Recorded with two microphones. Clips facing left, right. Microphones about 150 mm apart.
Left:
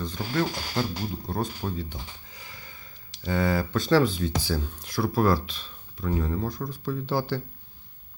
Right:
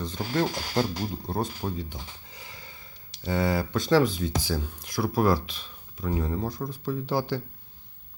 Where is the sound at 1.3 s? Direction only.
20° right (ahead or behind).